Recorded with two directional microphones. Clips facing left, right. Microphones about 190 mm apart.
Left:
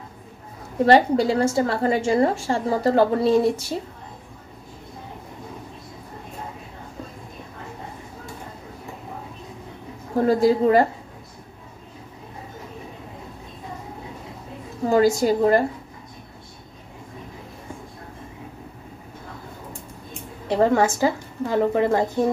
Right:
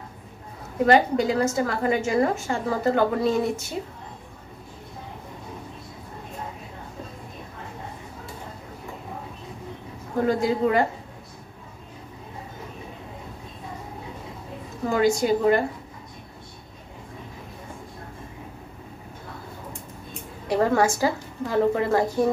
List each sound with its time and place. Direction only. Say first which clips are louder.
0.8 s a woman's voice: left 3 dB; 35° left (ahead or behind)
10.1 s a woman's voice: left 5 dB; 35° left (ahead or behind)
14.9 s a woman's voice: left 3 dB; 35° left (ahead or behind)
20.4 s a woman's voice: left 2 dB; 20° left (ahead or behind)